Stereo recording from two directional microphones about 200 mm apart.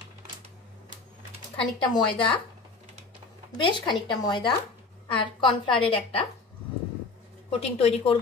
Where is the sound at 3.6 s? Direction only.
25° left (ahead or behind).